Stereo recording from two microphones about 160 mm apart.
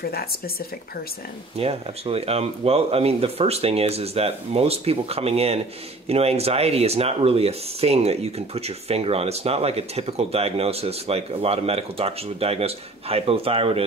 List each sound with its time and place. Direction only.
0.0 s speech: 75° left (ahead or behind)
1.6 s speech: 40° right (ahead or behind)